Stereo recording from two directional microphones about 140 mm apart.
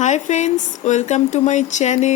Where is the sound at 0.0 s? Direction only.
60° left (ahead or behind).